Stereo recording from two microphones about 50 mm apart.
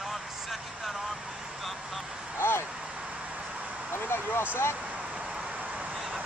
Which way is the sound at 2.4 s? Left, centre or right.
Left.